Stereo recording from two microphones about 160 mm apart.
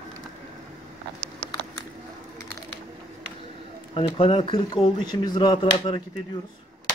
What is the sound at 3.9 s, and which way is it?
Speech, 35° left (ahead or behind).